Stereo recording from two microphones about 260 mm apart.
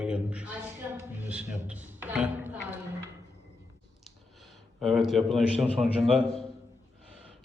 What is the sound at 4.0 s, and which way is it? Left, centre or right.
Speech, centre.